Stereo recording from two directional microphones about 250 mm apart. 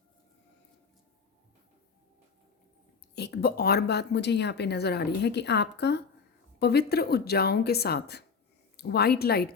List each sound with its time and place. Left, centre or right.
3.2 s speech: left